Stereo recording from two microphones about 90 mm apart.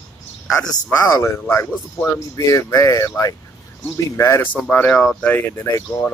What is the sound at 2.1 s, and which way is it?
Speech, 35° left (ahead or behind).